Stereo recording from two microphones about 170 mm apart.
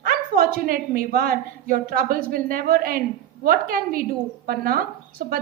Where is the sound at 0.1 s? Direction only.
60° right (ahead or behind).